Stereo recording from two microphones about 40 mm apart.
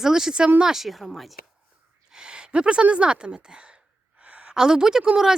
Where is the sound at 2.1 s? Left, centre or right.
Right.